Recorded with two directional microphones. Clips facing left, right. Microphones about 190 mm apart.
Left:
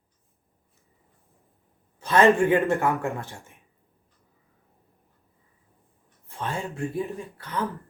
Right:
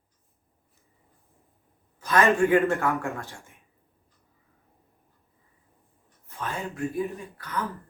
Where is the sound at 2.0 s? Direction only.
30° left (ahead or behind).